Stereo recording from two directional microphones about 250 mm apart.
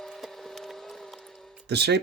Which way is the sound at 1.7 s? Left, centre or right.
Right.